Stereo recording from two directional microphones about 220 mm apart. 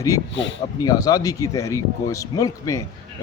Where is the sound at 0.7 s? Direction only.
15° left (ahead or behind).